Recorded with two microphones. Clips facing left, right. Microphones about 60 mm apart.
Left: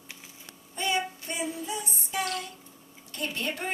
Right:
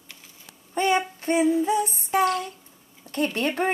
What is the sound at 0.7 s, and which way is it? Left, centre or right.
Child singing, right.